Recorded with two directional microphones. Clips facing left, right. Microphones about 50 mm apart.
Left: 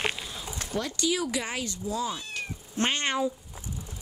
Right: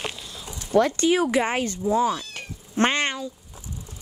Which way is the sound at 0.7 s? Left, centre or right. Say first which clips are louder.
Right 10 dB; right.